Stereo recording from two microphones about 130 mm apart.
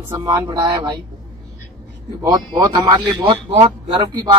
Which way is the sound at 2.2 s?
30° right (ahead or behind).